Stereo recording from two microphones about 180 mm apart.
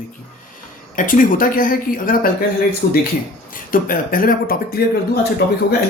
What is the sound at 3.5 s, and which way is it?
Speech, 50° left (ahead or behind).